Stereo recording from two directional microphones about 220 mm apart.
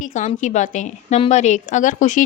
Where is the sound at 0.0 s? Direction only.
35° left (ahead or behind).